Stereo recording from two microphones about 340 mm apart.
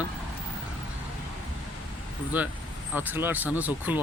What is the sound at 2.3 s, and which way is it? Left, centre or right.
Speech, centre.